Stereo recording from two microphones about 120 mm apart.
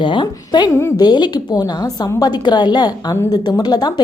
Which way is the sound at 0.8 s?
20° left (ahead or behind).